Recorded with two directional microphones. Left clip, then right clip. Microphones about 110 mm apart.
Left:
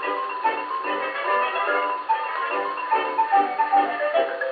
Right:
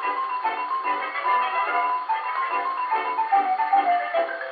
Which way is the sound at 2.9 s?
30° right (ahead or behind).